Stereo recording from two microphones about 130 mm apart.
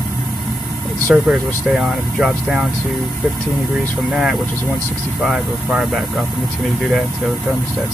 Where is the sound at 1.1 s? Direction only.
Centre (ahead or behind).